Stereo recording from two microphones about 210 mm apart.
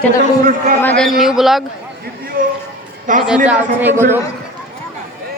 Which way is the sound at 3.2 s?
5° right (ahead or behind).